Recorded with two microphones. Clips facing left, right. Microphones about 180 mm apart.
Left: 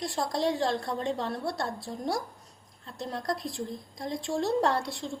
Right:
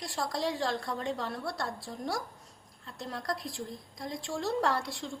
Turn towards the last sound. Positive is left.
turn(degrees=25)  # may be behind; listen again after turning